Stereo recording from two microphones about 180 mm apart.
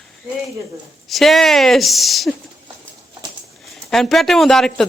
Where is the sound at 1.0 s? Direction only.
Centre (ahead or behind).